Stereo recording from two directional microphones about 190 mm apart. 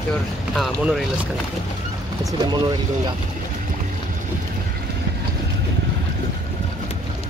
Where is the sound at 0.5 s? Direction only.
Centre (ahead or behind).